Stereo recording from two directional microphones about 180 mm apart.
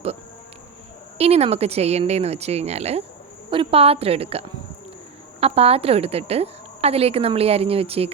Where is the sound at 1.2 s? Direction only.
35° right (ahead or behind).